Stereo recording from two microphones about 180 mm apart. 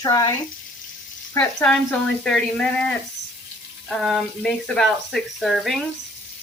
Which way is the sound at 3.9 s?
Centre (ahead or behind).